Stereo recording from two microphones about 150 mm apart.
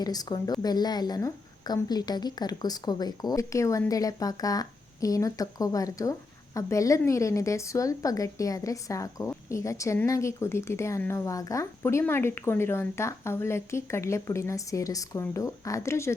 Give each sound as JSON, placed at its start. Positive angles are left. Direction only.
{"t": 0.0, "sound": "a woman's voice", "side_deg": 25}